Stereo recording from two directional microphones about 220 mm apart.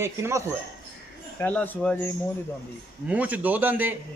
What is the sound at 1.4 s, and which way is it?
Speech, 10° left (ahead or behind).